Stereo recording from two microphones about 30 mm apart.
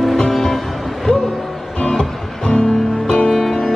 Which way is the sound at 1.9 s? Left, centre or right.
Left.